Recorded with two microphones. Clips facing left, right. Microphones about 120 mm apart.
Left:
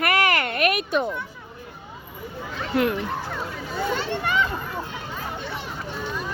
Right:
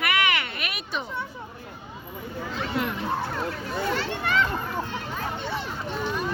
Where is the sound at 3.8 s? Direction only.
15° left (ahead or behind).